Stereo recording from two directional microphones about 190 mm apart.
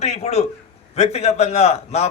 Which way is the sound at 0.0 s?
35° left (ahead or behind).